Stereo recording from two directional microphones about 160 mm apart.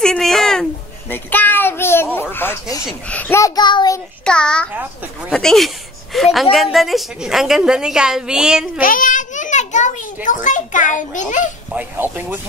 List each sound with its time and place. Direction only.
0.0 s a sound: 5° left (ahead or behind)
3.1 s a child's voice: 10° left (ahead or behind)
4.2 s a woman's voice: 5° left (ahead or behind)
8.8 s a child's voice: 60° left (ahead or behind)
11.7 s speech: 10° right (ahead or behind)